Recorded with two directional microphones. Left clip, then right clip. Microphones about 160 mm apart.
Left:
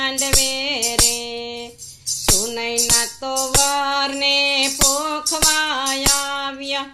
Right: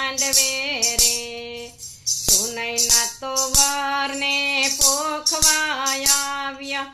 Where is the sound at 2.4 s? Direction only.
40° left (ahead or behind).